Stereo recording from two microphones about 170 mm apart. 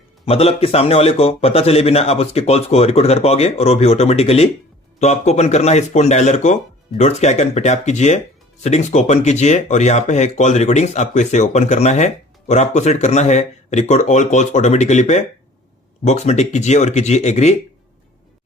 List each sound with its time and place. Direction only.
0.3 s speech: 35° left (ahead or behind)